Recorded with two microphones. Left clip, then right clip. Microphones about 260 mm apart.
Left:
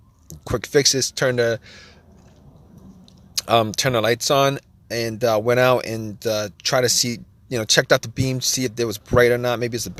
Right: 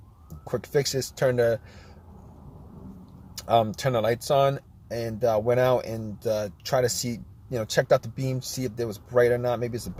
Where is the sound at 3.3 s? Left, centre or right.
Left.